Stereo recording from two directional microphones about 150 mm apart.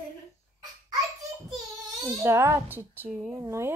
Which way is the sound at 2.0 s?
20° right (ahead or behind).